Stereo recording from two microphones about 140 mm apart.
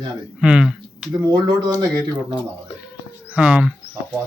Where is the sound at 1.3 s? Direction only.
30° right (ahead or behind).